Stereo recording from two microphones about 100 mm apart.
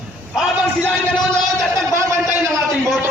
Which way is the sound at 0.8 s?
10° left (ahead or behind).